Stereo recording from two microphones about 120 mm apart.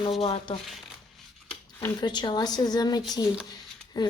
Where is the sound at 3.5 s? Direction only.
35° left (ahead or behind).